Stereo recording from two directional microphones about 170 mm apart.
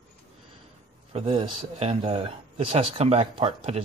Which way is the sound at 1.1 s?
30° right (ahead or behind).